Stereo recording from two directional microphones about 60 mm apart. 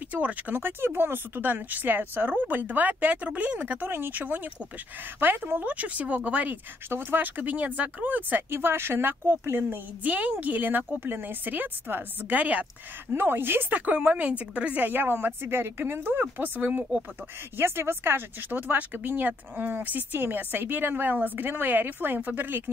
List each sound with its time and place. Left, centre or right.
0.1 s speech: right
0.6 s speech: right
6.9 s speech: right
13.1 s speech: right
17.6 s speech: right